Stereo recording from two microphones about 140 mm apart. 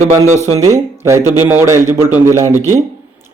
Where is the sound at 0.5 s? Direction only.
25° right (ahead or behind).